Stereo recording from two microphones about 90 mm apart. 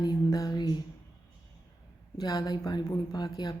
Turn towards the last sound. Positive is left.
turn(degrees=50)  # may be behind; listen again after turning